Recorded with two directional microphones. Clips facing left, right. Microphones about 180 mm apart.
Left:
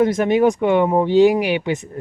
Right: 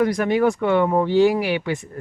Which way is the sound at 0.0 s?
25° left (ahead or behind).